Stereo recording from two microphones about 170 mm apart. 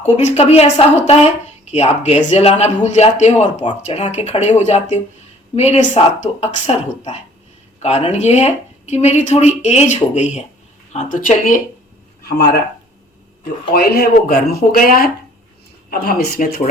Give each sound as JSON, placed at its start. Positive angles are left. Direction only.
{"t": 0.0, "sound": "a woman's voice", "side_deg": 40}
{"t": 13.4, "sound": "speech", "side_deg": 65}